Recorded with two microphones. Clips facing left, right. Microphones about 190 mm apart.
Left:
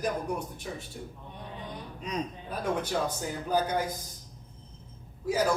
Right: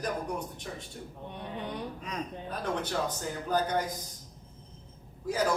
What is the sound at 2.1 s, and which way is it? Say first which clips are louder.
Speech: left 6 dB; 20° left (ahead or behind).